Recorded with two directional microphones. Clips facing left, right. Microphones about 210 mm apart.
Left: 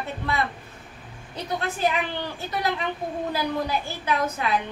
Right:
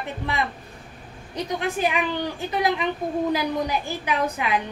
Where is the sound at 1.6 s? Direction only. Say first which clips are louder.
Right 1 dB; 15° right (ahead or behind).